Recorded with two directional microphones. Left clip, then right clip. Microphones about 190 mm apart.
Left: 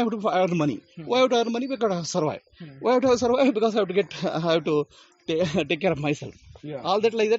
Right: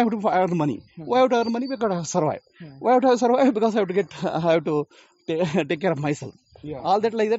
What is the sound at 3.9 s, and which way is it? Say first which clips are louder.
Speech: right 1 dB; 35° right (ahead or behind).